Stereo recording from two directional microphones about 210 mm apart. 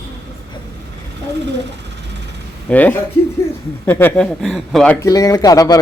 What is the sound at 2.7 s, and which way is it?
A man's voice, 5° left (ahead or behind).